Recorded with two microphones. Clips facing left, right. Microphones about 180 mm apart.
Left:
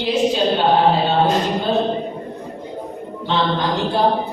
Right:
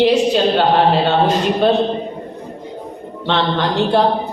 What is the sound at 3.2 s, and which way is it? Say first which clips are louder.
Speech: right 2 dB; 75° right (ahead or behind).